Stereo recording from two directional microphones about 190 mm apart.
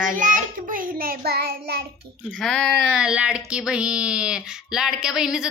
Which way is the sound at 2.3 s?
5° left (ahead or behind).